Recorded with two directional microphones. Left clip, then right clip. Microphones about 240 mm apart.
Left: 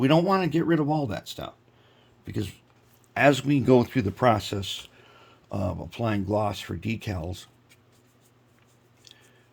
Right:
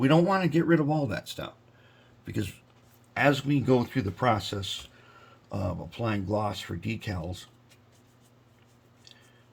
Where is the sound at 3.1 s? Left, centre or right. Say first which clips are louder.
Left 4 dB; left.